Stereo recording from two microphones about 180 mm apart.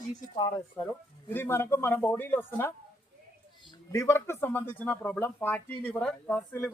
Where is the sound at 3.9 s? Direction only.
15° left (ahead or behind).